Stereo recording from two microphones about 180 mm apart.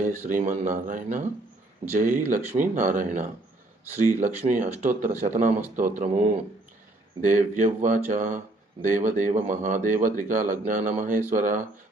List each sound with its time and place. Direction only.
0.3 s speech: 45° right (ahead or behind)